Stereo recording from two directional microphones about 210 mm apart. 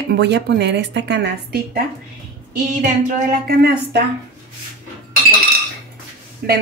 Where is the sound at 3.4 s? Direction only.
50° right (ahead or behind).